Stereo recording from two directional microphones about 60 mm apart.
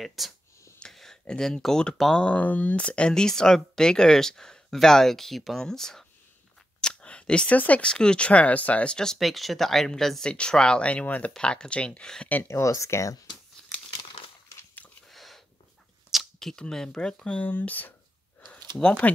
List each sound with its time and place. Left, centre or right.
0.0 s speech: centre
0.7 s a sound: centre
1.2 s speech: centre
2.2 s speech: left; by 6.0 s centre
6.8 s a sound: centre
7.5 s speech: left
8.9 s speech: centre; by 11.3 s left
11.3 s speech: centre
12.4 s speech: left
13.6 s crumpling: centre
15.0 s a sound: centre
16.5 s speech: centre
17.4 s speech: left
18.5 s speech: centre